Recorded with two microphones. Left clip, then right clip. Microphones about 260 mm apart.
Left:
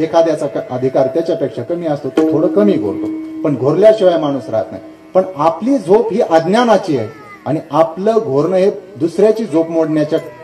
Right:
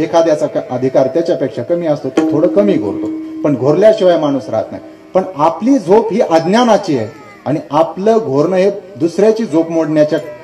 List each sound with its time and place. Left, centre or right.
0.0 s a man's voice: right